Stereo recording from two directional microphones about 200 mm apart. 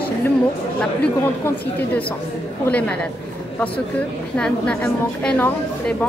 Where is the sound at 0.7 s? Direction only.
10° left (ahead or behind).